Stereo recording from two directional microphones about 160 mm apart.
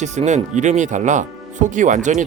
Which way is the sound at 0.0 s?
45° right (ahead or behind).